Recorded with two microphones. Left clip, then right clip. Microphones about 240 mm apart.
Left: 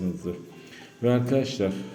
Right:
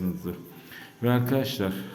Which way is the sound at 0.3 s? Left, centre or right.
Centre.